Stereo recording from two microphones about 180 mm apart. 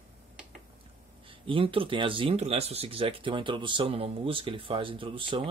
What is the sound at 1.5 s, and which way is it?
Speech, 30° right (ahead or behind).